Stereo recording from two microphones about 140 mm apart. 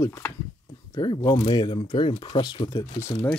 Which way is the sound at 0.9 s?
30° left (ahead or behind).